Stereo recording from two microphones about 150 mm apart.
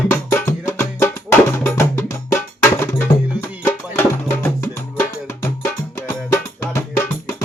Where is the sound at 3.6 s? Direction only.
15° left (ahead or behind).